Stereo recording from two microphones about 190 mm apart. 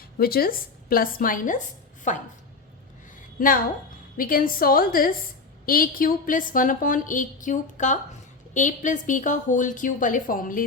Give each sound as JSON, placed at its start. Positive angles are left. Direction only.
{"t": 0.0, "sound": "a woman's voice", "side_deg": 50}
{"t": 3.4, "sound": "a woman's voice", "side_deg": 45}